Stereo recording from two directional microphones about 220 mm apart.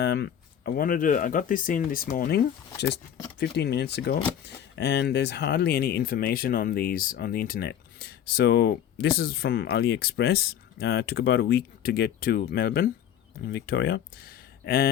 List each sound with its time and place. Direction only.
0.0 s speech: 50° left (ahead or behind)
3.4 s speech: 50° left (ahead or behind)